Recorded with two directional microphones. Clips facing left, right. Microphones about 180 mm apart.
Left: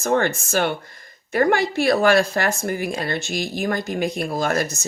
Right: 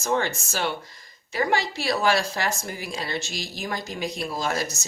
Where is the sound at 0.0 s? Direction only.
55° left (ahead or behind).